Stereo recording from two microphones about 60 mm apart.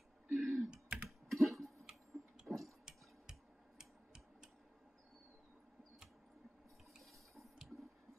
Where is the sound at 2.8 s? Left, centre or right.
Centre.